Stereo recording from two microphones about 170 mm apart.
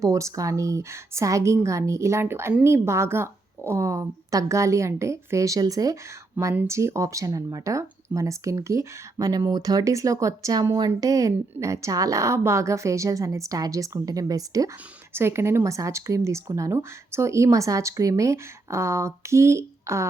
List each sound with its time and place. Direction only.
0.0 s speech: 20° right (ahead or behind)